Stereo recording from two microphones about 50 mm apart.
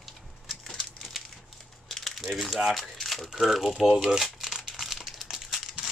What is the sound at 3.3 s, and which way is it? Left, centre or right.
Speech, centre.